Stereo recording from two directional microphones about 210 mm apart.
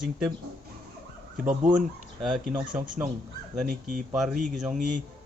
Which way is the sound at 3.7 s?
40° right (ahead or behind).